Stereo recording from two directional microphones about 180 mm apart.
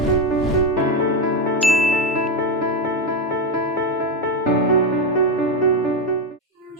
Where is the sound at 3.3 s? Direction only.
20° right (ahead or behind).